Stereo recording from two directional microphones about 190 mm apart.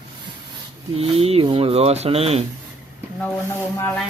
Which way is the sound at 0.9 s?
30° right (ahead or behind).